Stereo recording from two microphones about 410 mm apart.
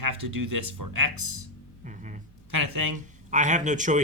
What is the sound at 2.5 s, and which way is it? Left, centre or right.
Speech, right.